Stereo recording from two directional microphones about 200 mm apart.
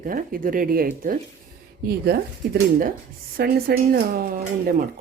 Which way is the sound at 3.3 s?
50° right (ahead or behind).